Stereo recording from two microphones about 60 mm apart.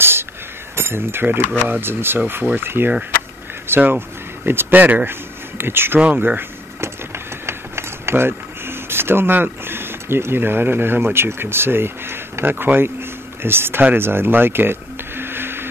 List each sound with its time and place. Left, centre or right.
0.0 s a sound: right
0.7 s speech: right
5.9 s speech: right
7.4 s speech: right
13.9 s radio: right